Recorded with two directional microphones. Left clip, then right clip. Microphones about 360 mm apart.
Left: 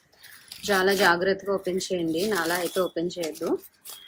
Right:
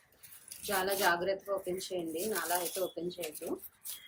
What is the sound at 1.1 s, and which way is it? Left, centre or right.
Speech, centre.